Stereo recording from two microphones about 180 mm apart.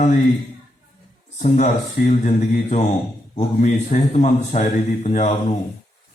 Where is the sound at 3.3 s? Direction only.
40° left (ahead or behind).